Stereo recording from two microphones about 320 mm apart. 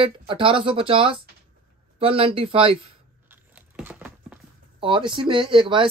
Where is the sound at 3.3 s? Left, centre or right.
Centre.